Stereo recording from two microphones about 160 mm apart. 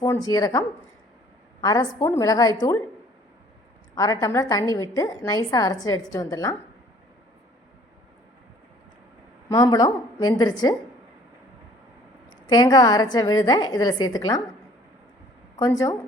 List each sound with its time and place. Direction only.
0.0 s a woman's voice: 25° left (ahead or behind)
1.6 s a woman's voice: 25° left (ahead or behind)
3.9 s a woman's voice: 20° left (ahead or behind)
9.5 s a woman's voice: 25° left (ahead or behind)
12.5 s a woman's voice: 25° left (ahead or behind)
15.5 s a woman's voice: 20° left (ahead or behind)